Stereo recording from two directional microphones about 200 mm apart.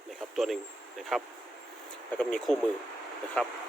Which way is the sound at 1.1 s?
Centre (ahead or behind).